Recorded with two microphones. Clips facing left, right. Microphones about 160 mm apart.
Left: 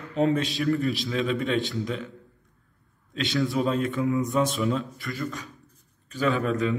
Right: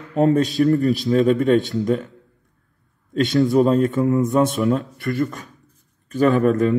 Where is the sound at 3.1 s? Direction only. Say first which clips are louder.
Right 9 dB; 45° right (ahead or behind).